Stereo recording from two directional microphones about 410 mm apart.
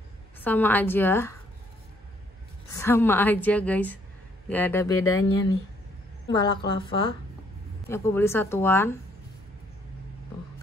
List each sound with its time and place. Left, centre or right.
0.4 s a woman's voice: centre
2.7 s a woman's voice: centre
5.0 s speech: left
6.2 s a woman's voice: centre